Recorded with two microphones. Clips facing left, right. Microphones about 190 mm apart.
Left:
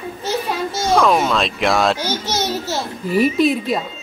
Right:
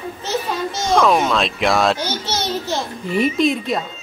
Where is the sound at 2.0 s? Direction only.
10° left (ahead or behind).